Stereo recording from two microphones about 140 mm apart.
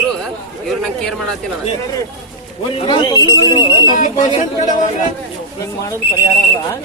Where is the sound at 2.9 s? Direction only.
30° left (ahead or behind).